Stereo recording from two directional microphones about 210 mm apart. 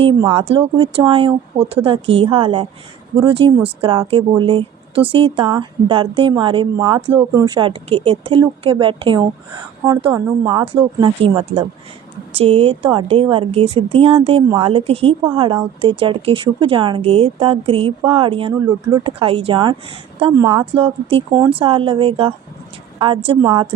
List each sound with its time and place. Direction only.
0.0 s speech: 25° right (ahead or behind)